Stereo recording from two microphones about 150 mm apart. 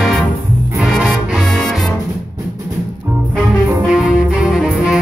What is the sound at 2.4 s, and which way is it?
Music, 20° right (ahead or behind).